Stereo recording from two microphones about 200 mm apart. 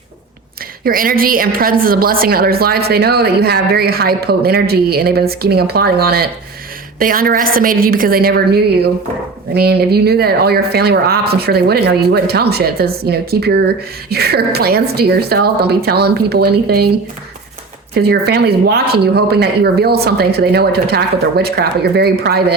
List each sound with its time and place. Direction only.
0.9 s a woman's voice: 45° right (ahead or behind)
17.9 s a woman's voice: 55° right (ahead or behind)